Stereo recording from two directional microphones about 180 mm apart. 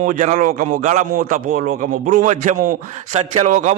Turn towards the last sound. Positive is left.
turn(degrees=-45)  # may be behind; listen again after turning